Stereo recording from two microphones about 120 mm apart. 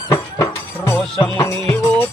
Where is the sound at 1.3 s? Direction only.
25° left (ahead or behind).